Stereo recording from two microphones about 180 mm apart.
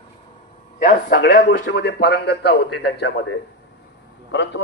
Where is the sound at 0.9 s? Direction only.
45° left (ahead or behind).